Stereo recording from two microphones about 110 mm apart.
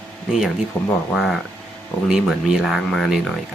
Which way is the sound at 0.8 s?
20° left (ahead or behind).